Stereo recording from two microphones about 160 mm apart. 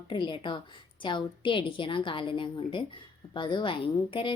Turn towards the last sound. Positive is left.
turn(degrees=30)  # may be behind; listen again after turning